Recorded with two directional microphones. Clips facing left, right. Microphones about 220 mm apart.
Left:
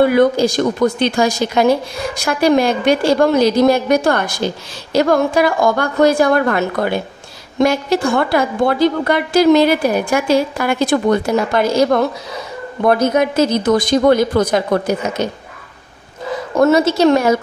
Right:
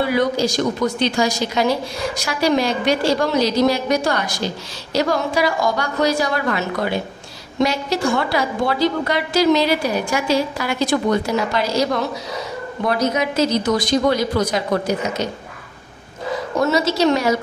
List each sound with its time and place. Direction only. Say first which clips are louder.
0.0 s a woman's voice: left 6 dB; 55° left (ahead or behind)
16.5 s a woman's voice: left 6 dB; 55° left (ahead or behind)